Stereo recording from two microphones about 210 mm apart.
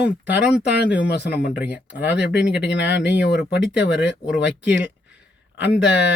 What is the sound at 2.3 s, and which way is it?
Speech, 55° left (ahead or behind).